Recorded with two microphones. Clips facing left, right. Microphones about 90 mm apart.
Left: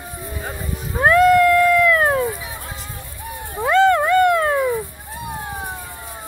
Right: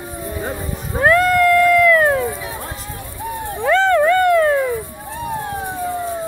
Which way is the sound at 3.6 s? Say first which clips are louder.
Even; 15° left (ahead or behind).